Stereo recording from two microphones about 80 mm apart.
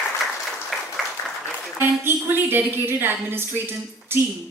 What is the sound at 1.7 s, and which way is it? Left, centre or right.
A woman's voice, right.